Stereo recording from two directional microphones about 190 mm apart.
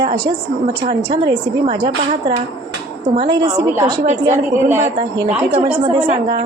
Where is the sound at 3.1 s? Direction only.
25° right (ahead or behind).